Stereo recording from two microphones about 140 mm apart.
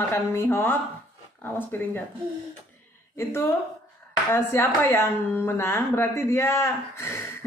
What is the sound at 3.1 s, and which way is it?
A woman's voice, 15° left (ahead or behind).